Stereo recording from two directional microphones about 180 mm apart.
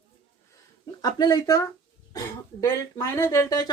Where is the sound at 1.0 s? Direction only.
20° left (ahead or behind).